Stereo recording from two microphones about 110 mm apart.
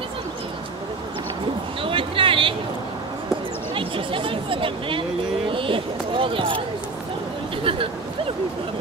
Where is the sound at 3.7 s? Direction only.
55° right (ahead or behind).